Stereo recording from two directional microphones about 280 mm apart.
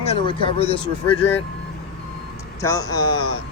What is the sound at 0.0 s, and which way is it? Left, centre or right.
Speech, centre.